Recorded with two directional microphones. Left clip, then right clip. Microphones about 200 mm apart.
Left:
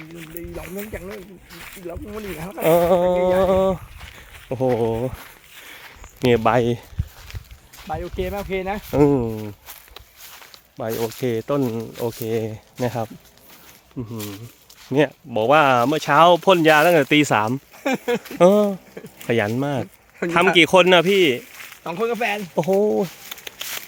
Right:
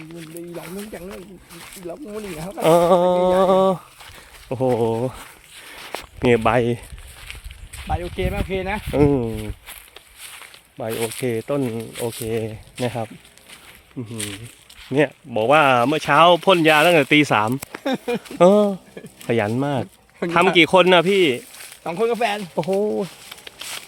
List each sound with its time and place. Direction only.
2.6 s humming: 15° right (ahead or behind)
4.4 s speech: centre (ahead or behind)
6.3 s speech: centre (ahead or behind)
7.8 s a sound: 10° left (ahead or behind)
8.1 s speech: 55° right (ahead or behind)
8.9 s speech: centre (ahead or behind)
10.8 s speech: 10° left (ahead or behind)
14.1 s speech: 5° right (ahead or behind)
18.2 s humming: 5° right (ahead or behind)
19.3 s speech: 5° right (ahead or behind)
21.8 s speech: 40° right (ahead or behind)
22.8 s a sound: 15° left (ahead or behind)